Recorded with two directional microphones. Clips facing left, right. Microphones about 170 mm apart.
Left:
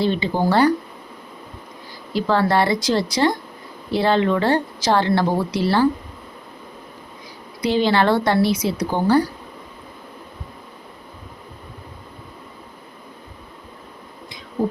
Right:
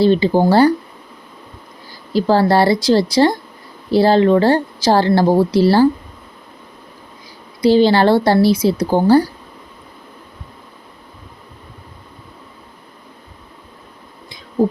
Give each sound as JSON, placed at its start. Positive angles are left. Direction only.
{"t": 0.0, "sound": "a woman's voice", "side_deg": -35}
{"t": 2.1, "sound": "a woman's voice", "side_deg": -35}
{"t": 7.6, "sound": "a woman's voice", "side_deg": -35}